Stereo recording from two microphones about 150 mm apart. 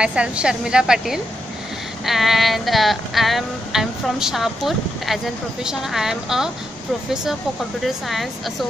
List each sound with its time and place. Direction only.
0.0 s music: 5° right (ahead or behind)
7.8 s music: centre (ahead or behind)